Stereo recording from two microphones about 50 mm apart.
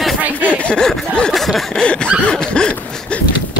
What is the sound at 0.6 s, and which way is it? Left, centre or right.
Speech, centre.